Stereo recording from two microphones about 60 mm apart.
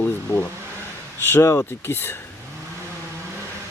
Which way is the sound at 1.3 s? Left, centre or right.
Left.